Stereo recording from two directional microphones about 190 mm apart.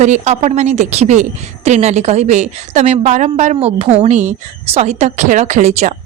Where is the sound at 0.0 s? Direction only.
35° right (ahead or behind).